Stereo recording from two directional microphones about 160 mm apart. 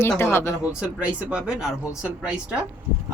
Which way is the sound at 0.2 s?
15° left (ahead or behind).